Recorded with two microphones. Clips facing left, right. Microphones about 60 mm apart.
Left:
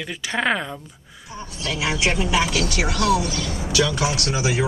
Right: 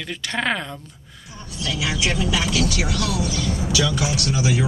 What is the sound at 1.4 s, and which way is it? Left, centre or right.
Speech, left.